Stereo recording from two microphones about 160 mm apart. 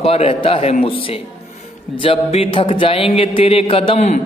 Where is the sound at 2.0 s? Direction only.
35° left (ahead or behind).